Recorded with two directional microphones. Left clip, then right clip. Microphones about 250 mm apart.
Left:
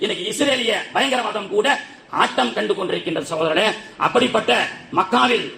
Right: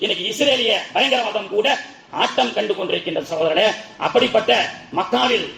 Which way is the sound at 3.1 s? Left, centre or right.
Left.